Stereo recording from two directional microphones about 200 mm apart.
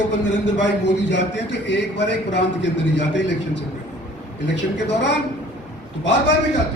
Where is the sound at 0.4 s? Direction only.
65° left (ahead or behind).